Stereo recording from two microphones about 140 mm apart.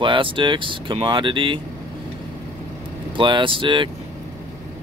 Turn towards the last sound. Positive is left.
turn(degrees=-35)  # may be behind; listen again after turning